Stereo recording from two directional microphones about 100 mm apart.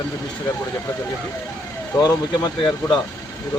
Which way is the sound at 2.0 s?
40° left (ahead or behind).